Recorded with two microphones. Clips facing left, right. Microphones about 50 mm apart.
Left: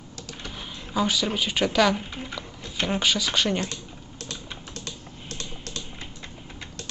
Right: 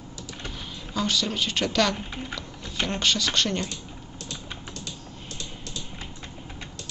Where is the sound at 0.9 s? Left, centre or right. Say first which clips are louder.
Left 2 dB; centre.